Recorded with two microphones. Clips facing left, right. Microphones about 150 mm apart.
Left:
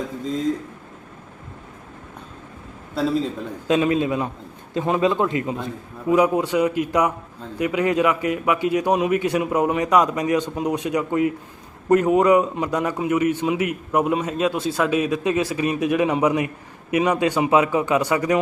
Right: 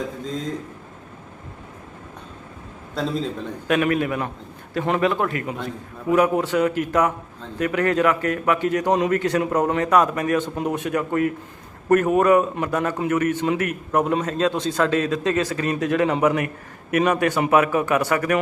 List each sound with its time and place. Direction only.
3.7 s a man's voice: 20° left (ahead or behind)